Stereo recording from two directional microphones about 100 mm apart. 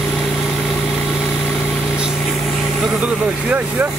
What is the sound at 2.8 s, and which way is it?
Vehicle, 10° right (ahead or behind).